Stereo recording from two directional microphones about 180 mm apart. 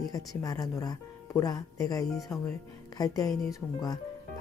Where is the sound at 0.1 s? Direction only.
20° left (ahead or behind).